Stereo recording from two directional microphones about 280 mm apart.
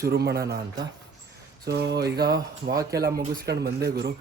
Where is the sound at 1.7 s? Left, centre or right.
Right.